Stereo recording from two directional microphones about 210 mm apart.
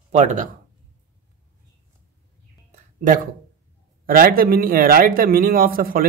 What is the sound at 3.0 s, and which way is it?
A man's voice, 40° right (ahead or behind).